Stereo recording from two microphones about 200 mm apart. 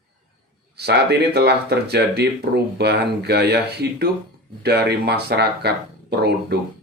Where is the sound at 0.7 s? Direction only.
55° right (ahead or behind).